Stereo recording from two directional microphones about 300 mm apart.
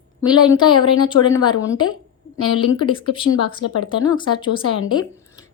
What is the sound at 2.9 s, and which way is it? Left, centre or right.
A woman's voice, centre.